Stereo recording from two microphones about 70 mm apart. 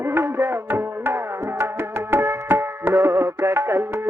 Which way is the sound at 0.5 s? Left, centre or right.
Right.